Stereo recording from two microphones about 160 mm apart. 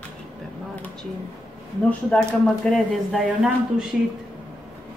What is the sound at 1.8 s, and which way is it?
Speech, 5° left (ahead or behind).